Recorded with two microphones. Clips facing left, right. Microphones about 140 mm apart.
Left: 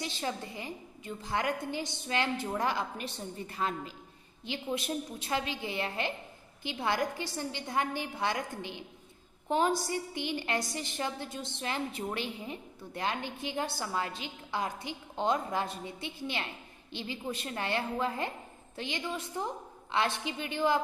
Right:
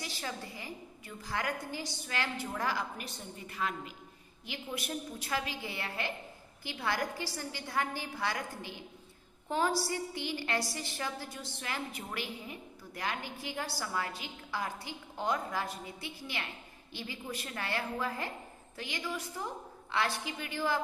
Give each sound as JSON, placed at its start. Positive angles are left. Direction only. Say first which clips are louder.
{"t": 0.0, "sound": "a woman's voice", "louder": "left 5 dB", "side_deg": 25}